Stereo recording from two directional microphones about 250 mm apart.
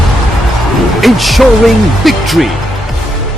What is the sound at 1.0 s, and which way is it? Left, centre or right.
Speech, centre.